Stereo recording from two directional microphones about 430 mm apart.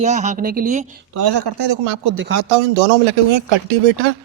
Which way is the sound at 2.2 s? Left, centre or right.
Right.